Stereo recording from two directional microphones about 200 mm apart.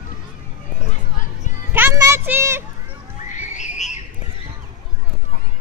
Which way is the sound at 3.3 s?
35° left (ahead or behind).